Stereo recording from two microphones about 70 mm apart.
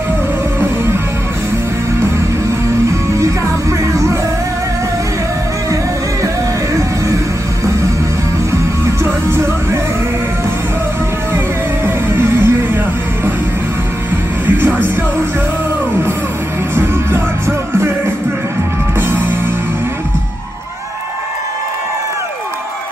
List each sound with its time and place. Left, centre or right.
3.9 s music: right
6.2 s music: right
9.0 s music: right
11.3 s music: right
14.4 s music: right
16.7 s music: right
18.9 s music: right